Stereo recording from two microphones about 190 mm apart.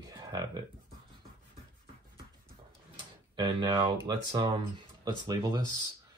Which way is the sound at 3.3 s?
25° right (ahead or behind).